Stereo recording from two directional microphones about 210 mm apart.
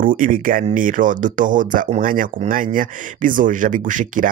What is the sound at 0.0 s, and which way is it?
Speech, 40° right (ahead or behind).